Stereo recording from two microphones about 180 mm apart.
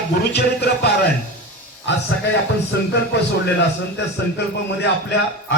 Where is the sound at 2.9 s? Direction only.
70° left (ahead or behind).